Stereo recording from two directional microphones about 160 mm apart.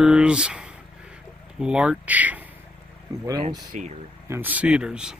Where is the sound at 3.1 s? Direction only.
20° right (ahead or behind).